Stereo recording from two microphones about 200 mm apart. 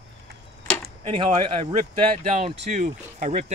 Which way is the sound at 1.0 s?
25° right (ahead or behind).